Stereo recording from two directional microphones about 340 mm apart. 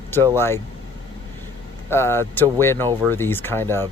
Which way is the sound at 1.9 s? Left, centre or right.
Centre.